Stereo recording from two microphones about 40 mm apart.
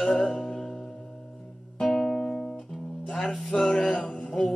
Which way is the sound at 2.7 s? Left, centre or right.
Centre.